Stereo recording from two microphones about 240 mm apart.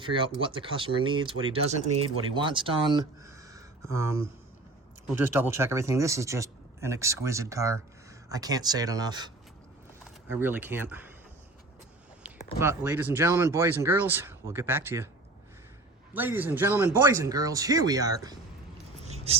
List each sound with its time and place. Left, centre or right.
0.0 s speech: right
1.9 s speech: right
2.2 s speech: centre
12.5 s speech: centre
16.1 s speech: centre
19.0 s a sound: right